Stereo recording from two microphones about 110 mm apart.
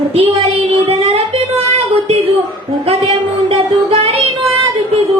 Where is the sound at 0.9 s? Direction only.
65° right (ahead or behind).